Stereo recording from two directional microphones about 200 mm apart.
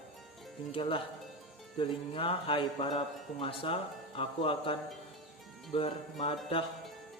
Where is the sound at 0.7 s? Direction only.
25° left (ahead or behind).